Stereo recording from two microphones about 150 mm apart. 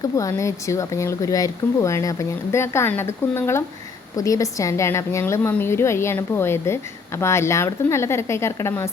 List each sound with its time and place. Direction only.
0.0 s a woman's voice: 20° left (ahead or behind)